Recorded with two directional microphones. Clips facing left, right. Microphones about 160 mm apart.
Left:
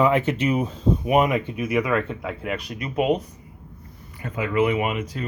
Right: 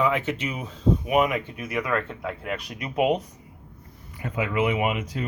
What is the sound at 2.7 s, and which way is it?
Speech, 15° right (ahead or behind).